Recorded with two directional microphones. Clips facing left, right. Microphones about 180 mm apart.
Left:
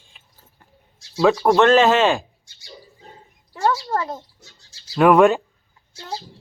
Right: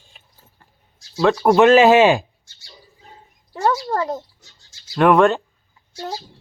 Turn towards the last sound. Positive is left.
turn(degrees=5)  # may be behind; listen again after turning